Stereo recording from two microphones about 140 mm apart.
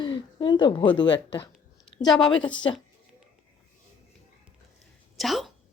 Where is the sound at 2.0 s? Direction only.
Centre (ahead or behind).